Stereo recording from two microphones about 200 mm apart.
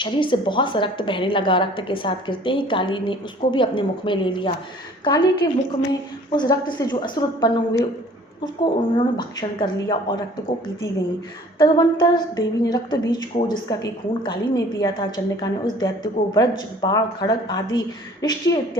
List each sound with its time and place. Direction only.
0.0 s a woman's voice: 25° left (ahead or behind)
9.0 s a woman's voice: 25° left (ahead or behind)
11.5 s a woman's voice: 25° left (ahead or behind)